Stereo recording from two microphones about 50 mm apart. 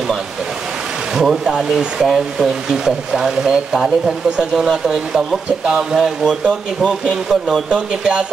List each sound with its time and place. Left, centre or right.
1.1 s speech: centre
7.7 s speech: centre